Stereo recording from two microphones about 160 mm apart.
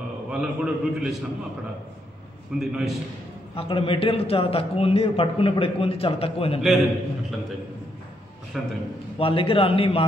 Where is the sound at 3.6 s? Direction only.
35° left (ahead or behind).